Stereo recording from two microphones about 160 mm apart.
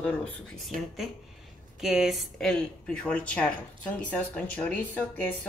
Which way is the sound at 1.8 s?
5° right (ahead or behind).